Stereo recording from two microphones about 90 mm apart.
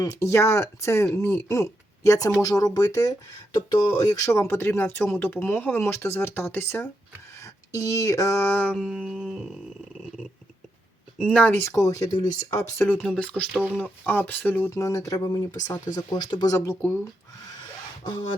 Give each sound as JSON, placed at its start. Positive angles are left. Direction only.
{"t": 0.0, "sound": "speech", "side_deg": 30}
{"t": 3.1, "sound": "speech", "side_deg": 50}
{"t": 4.3, "sound": "speech", "side_deg": 30}
{"t": 7.3, "sound": "speech", "side_deg": 35}
{"t": 8.4, "sound": "a sound", "side_deg": 20}
{"t": 9.0, "sound": "a sound", "side_deg": -5}
{"t": 11.3, "sound": "a sound", "side_deg": 10}
{"t": 11.5, "sound": "speech", "side_deg": 30}
{"t": 11.8, "sound": "speech", "side_deg": 40}
{"t": 12.7, "sound": "speech", "side_deg": 30}
{"t": 13.1, "sound": "a sound", "side_deg": 15}
{"t": 13.7, "sound": "speech", "side_deg": 20}
{"t": 14.8, "sound": "speech", "side_deg": 35}
{"t": 16.8, "sound": "speech", "side_deg": 25}